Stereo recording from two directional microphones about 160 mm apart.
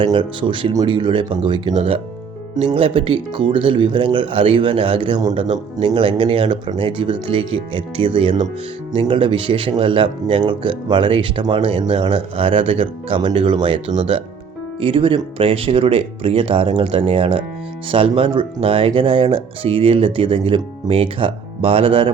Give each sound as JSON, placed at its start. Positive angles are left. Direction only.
{"t": 0.0, "sound": "a man's voice", "side_deg": -30}